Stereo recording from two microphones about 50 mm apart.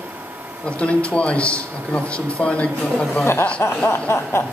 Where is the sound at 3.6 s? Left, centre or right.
Left.